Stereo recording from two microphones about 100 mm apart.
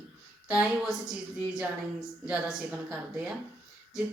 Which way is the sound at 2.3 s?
10° right (ahead or behind).